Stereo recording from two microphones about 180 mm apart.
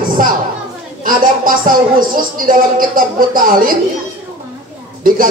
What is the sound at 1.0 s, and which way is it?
A man's voice, 50° right (ahead or behind).